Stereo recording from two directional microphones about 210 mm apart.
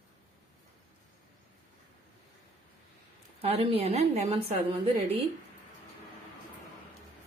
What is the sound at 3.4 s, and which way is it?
Speech, 30° right (ahead or behind).